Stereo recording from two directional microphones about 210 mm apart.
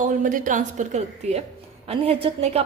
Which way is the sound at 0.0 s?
40° right (ahead or behind).